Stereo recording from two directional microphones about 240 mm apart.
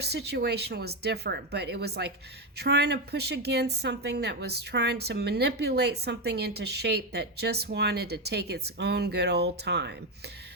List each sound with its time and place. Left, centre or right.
0.0 s a woman's voice: right